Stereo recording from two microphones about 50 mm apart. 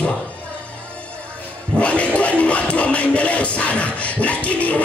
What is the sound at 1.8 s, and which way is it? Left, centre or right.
Music, left.